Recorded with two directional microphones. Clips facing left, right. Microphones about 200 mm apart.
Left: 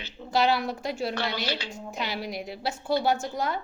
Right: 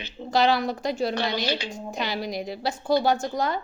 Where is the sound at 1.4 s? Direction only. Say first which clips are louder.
Right 4 dB; 15° right (ahead or behind).